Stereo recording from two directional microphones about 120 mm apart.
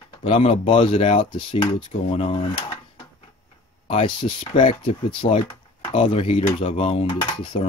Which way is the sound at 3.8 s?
45° left (ahead or behind).